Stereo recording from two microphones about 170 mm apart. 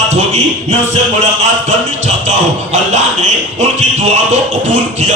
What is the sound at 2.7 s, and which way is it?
Music, 45° right (ahead or behind).